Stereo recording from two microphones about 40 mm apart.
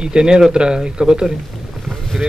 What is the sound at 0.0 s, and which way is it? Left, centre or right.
A man's voice, right.